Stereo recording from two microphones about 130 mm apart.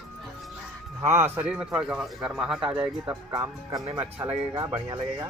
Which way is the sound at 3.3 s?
20° right (ahead or behind).